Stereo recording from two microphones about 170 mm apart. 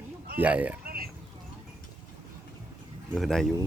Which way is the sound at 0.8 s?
60° right (ahead or behind).